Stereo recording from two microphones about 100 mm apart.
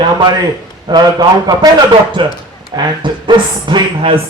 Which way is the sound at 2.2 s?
55° right (ahead or behind).